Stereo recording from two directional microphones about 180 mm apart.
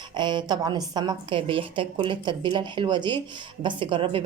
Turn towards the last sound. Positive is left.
turn(degrees=-30)  # may be behind; listen again after turning